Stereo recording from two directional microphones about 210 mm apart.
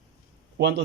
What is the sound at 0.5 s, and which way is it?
Speech, 55° right (ahead or behind).